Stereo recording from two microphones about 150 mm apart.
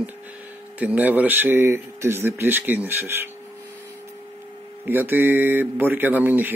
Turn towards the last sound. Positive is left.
turn(degrees=-10)  # may be behind; listen again after turning